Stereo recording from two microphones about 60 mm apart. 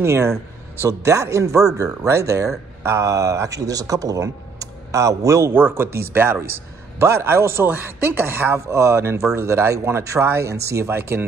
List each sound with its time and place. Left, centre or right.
0.0 s speech: right
5.5 s speech: right